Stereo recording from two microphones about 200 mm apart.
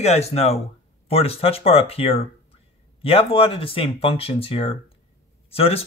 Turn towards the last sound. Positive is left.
turn(degrees=30)  # may be behind; listen again after turning